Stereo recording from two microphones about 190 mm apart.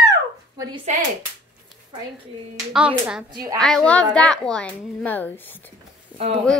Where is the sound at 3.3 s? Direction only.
20° right (ahead or behind).